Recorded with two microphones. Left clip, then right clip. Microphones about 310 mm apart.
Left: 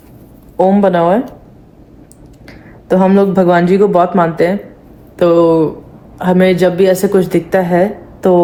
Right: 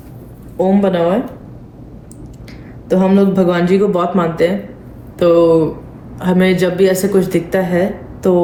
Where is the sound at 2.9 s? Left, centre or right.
Left.